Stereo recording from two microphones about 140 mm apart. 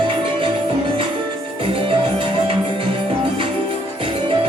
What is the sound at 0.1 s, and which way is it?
Music, 35° right (ahead or behind).